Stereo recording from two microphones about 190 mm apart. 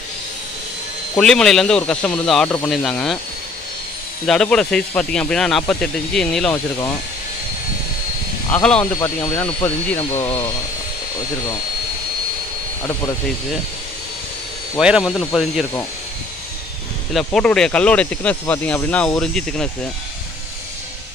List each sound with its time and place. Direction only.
1.1 s speech: 5° left (ahead or behind)
4.3 s speech: 5° left (ahead or behind)
6.5 s speech: 15° left (ahead or behind)
8.5 s speech: 10° left (ahead or behind)
9.9 s speech: 30° left (ahead or behind)
14.8 s speech: 5° right (ahead or behind)
17.1 s speech: 5° left (ahead or behind)